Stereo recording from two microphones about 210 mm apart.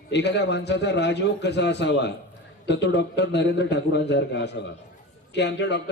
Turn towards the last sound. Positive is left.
turn(degrees=55)  # may be behind; listen again after turning